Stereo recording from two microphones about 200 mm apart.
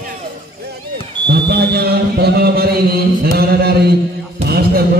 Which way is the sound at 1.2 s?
55° right (ahead or behind).